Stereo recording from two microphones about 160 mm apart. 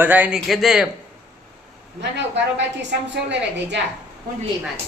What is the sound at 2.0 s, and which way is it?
Speech, 90° right.